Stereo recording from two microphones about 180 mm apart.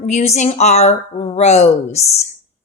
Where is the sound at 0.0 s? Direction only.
40° left (ahead or behind).